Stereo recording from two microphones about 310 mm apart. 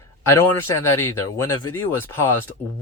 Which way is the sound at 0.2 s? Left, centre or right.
Centre.